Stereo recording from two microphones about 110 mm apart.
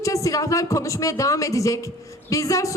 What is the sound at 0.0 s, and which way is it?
A woman's voice, 30° left (ahead or behind).